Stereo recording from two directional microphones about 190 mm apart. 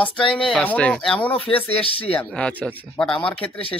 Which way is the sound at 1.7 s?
30° left (ahead or behind).